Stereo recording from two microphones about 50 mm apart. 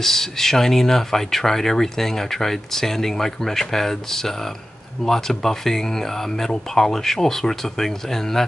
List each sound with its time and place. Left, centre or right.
0.0 s speech: centre